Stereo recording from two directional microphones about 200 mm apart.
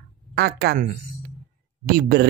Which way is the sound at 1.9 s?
50° right (ahead or behind).